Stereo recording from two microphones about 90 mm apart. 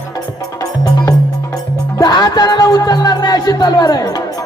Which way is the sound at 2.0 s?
45° left (ahead or behind).